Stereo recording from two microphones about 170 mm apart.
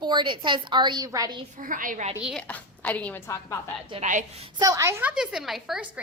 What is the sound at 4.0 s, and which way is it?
Speech, 45° right (ahead or behind).